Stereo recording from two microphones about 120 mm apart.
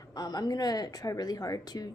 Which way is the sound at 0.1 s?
35° left (ahead or behind).